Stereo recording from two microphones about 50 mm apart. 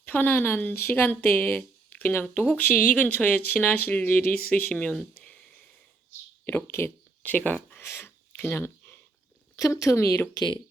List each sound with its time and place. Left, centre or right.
0.0 s speech: left
6.7 s speech: left
7.2 s speech: left
7.8 s a sound: left
8.4 s speech: left
9.6 s speech: left